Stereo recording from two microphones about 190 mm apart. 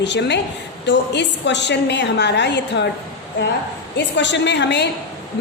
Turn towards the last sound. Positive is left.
turn(degrees=65)  # may be behind; listen again after turning